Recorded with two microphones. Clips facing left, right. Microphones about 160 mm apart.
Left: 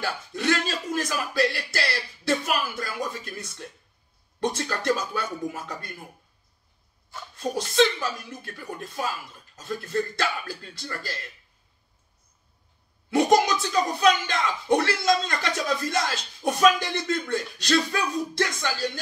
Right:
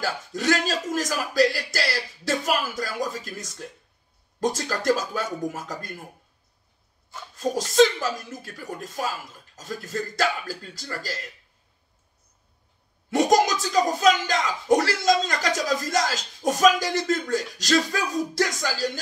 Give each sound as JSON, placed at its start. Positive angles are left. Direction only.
{"t": 0.0, "sound": "speech", "side_deg": -40}
{"t": 7.3, "sound": "speech", "side_deg": -40}
{"t": 13.1, "sound": "speech", "side_deg": -40}